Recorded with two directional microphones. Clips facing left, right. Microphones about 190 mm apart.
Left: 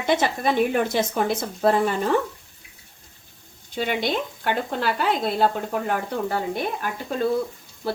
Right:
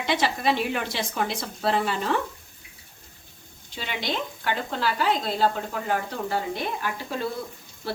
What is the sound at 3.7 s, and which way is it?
A woman's voice, 50° left (ahead or behind).